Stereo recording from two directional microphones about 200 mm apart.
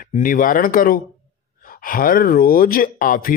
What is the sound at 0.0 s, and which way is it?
Speech, 45° left (ahead or behind).